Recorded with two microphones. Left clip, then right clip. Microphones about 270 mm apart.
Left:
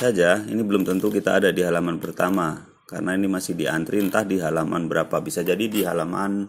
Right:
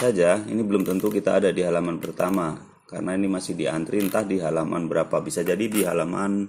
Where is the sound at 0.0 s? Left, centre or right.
Centre.